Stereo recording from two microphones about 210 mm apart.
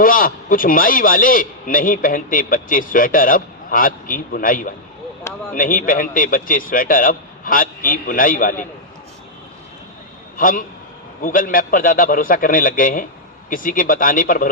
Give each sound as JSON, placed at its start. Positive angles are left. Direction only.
{"t": 0.0, "sound": "a man's voice", "side_deg": 40}
{"t": 10.3, "sound": "a man's voice", "side_deg": 40}